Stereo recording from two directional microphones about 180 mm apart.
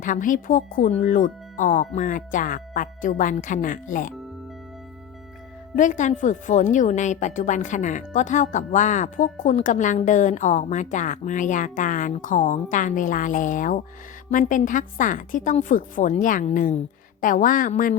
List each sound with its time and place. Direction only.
0.0 s a woman's voice: 45° left (ahead or behind)
5.7 s a woman's voice: 45° left (ahead or behind)